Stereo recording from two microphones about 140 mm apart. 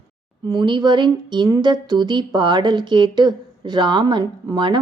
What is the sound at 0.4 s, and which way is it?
A woman's voice, 35° right (ahead or behind).